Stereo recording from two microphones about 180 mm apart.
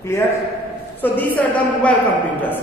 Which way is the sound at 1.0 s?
10° left (ahead or behind).